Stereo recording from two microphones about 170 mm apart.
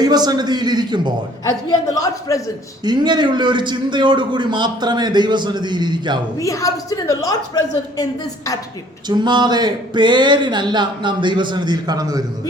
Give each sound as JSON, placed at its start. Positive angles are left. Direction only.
{"t": 0.0, "sound": "a man's voice", "side_deg": -25}
{"t": 2.0, "sound": "a woman's voice", "side_deg": 20}
{"t": 2.8, "sound": "a man's voice", "side_deg": -25}
{"t": 6.4, "sound": "a woman's voice", "side_deg": 20}
{"t": 9.0, "sound": "a man's voice", "side_deg": -25}